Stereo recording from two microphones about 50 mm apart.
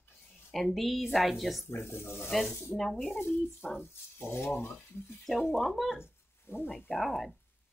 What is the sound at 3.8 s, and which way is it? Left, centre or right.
Speech, left.